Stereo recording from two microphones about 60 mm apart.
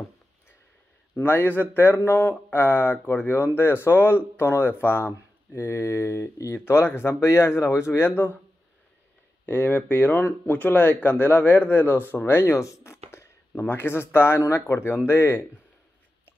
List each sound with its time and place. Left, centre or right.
1.1 s speech: left
6.6 s a man's voice: left
9.5 s speech: left
12.5 s a man's voice: left